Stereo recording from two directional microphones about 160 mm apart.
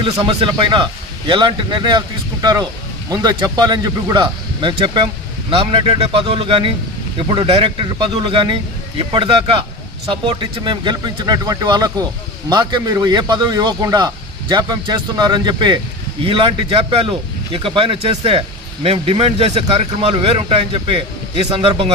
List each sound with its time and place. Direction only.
0.0 s speech: 35° right (ahead or behind)